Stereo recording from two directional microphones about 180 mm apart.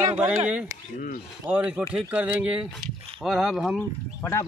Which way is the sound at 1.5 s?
5° right (ahead or behind).